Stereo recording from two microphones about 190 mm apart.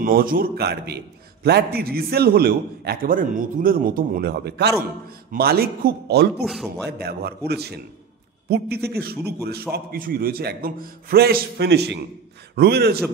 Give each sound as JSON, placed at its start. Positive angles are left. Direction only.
{"t": 0.0, "sound": "a man's voice", "side_deg": -50}
{"t": 6.4, "sound": "a man's voice", "side_deg": 0}
{"t": 7.0, "sound": "a man's voice", "side_deg": -55}